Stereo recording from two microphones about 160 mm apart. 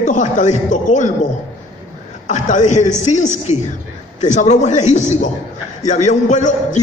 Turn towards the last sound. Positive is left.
turn(degrees=50)  # may be behind; listen again after turning